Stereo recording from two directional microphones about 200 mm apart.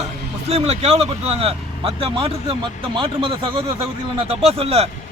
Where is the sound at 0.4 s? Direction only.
30° right (ahead or behind).